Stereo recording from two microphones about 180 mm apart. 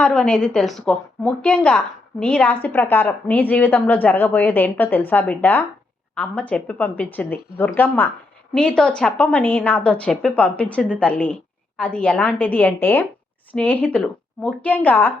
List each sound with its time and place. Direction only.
0.0 s a woman's voice: 5° left (ahead or behind)